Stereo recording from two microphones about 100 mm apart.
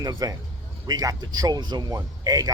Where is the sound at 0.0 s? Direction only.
40° right (ahead or behind).